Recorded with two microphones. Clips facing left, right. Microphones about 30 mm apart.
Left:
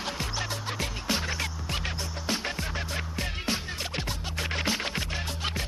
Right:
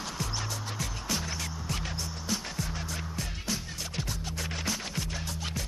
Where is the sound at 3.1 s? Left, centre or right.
Left.